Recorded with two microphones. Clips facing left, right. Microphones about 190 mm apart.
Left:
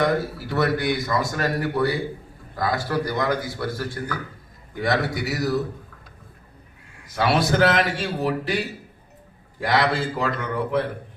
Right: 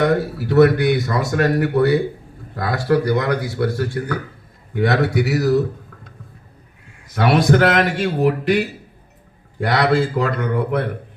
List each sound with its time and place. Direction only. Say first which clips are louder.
0.0 s speech: right 4 dB; 60° right (ahead or behind)
7.1 s speech: right 6 dB; 60° right (ahead or behind)